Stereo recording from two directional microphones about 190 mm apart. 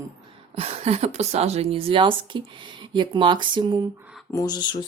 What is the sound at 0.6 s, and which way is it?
Speech, 35° right (ahead or behind).